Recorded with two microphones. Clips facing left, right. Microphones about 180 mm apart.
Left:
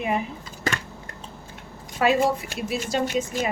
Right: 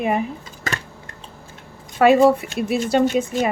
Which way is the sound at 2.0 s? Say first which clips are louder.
Right 8 dB; 60° right (ahead or behind).